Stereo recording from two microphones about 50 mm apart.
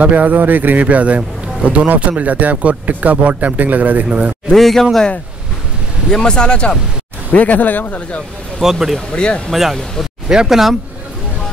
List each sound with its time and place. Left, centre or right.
0.0 s speech: right
4.5 s a man's voice: centre
6.2 s speech: centre
7.3 s speech: left
8.5 s speech: centre
9.1 s speech: left
9.5 s a man's voice: centre